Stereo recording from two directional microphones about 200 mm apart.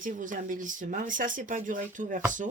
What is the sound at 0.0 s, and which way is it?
Speech, 40° right (ahead or behind).